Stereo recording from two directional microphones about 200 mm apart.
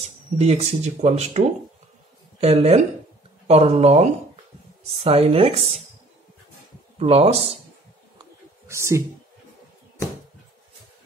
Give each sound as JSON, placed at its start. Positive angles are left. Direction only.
{"t": 0.4, "sound": "speech", "side_deg": -30}
{"t": 2.4, "sound": "speech", "side_deg": -30}
{"t": 7.0, "sound": "speech", "side_deg": -30}
{"t": 8.2, "sound": "a sound", "side_deg": -15}